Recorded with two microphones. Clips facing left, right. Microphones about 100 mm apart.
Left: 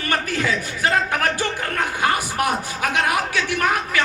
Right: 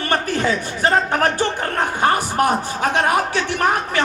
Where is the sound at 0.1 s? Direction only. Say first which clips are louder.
Right 3 dB; 35° right (ahead or behind).